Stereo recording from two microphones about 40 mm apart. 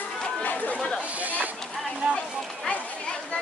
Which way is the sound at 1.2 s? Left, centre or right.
Right.